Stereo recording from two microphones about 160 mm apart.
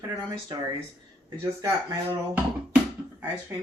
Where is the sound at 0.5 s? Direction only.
25° right (ahead or behind).